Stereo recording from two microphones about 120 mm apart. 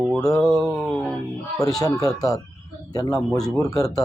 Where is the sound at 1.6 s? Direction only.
30° left (ahead or behind).